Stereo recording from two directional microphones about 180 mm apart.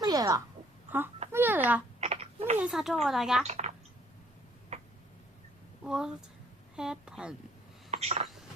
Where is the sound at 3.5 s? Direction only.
40° right (ahead or behind).